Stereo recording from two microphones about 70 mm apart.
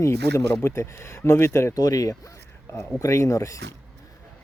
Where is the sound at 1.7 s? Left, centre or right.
Left.